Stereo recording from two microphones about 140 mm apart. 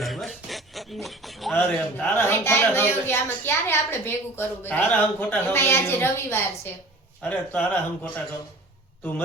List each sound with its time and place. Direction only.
0.0 s a sound: centre (ahead or behind)
1.0 s speech: centre (ahead or behind)
1.5 s speech: 15° left (ahead or behind)